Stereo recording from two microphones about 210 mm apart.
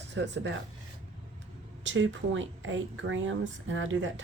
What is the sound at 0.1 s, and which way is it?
Speech, 55° right (ahead or behind).